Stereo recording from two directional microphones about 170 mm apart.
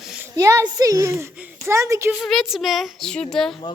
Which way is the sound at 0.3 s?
20° right (ahead or behind).